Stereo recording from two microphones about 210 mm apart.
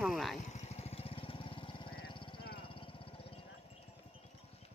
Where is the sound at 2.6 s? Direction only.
25° left (ahead or behind).